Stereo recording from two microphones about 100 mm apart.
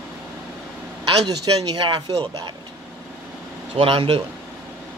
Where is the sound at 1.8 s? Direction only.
55° right (ahead or behind).